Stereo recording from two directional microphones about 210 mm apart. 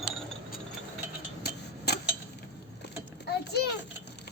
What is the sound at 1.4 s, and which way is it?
Tick-tock, 50° left (ahead or behind).